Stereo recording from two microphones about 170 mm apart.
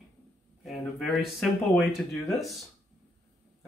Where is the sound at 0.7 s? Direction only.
Centre (ahead or behind).